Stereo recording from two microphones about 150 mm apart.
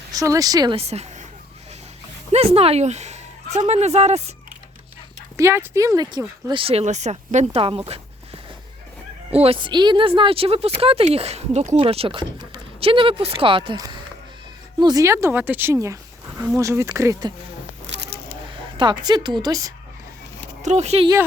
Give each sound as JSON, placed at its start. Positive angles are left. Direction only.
{"t": 0.1, "sound": "a woman's voice", "side_deg": -25}
{"t": 0.8, "sound": "a woman's voice", "side_deg": -45}
{"t": 2.3, "sound": "speech", "side_deg": -40}
{"t": 5.4, "sound": "a woman's voice", "side_deg": -20}
{"t": 7.9, "sound": "a sound", "side_deg": -40}
{"t": 9.3, "sound": "a woman's voice", "side_deg": -40}
{"t": 18.8, "sound": "a woman's voice", "side_deg": -30}
{"t": 20.6, "sound": "speech", "side_deg": -50}